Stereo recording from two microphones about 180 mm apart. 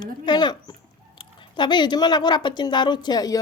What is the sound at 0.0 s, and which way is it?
Speech, 25° left (ahead or behind).